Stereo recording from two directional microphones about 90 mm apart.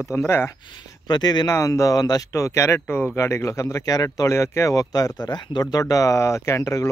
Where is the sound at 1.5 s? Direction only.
35° left (ahead or behind).